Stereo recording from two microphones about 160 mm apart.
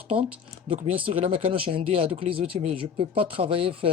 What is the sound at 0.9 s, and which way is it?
Speech, 35° right (ahead or behind).